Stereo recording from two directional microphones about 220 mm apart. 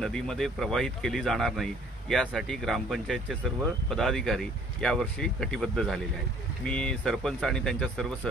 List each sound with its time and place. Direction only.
0.0 s speech: centre (ahead or behind)